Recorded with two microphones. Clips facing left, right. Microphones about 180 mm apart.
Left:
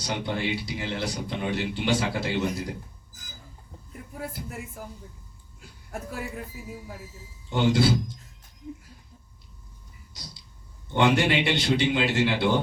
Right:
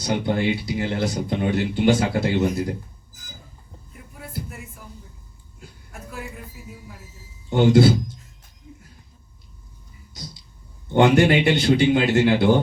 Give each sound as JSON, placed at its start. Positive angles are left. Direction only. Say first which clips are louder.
{"t": 0.1, "sound": "speech", "louder": "right 7 dB", "side_deg": -50}
{"t": 7.5, "sound": "speech", "louder": "right 7 dB", "side_deg": -50}
{"t": 10.9, "sound": "speech", "louder": "right 6 dB", "side_deg": -50}